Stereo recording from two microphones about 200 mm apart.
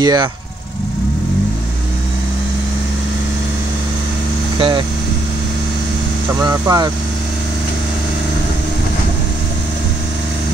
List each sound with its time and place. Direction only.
0.0 s speech: 20° right (ahead or behind)
4.6 s speech: 25° right (ahead or behind)
6.4 s speech: 20° right (ahead or behind)